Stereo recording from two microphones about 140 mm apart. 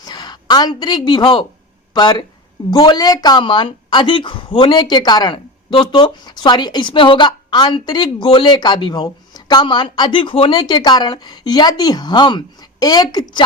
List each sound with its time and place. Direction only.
0.0 s a woman's voice: 30° left (ahead or behind)